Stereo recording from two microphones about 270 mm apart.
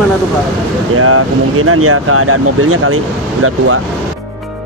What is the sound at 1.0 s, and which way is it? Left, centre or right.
Speech, right.